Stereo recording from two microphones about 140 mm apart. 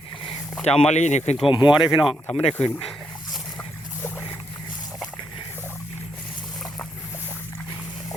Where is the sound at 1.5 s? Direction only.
35° left (ahead or behind).